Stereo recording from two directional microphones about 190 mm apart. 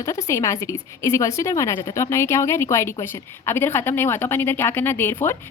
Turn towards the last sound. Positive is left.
turn(degrees=10)  # may be behind; listen again after turning